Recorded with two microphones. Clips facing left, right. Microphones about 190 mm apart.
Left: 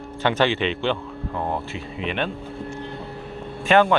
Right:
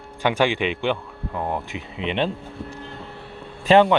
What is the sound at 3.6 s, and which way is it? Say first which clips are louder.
Speech: right 2 dB; 25° right (ahead or behind).